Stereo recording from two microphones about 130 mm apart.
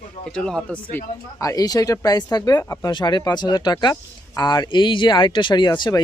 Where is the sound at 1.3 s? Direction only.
25° left (ahead or behind).